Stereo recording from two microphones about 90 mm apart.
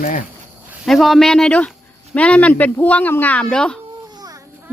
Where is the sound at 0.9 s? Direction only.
Centre (ahead or behind).